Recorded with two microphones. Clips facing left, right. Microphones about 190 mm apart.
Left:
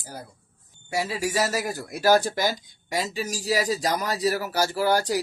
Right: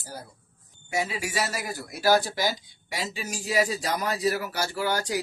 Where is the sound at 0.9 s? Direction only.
35° left (ahead or behind).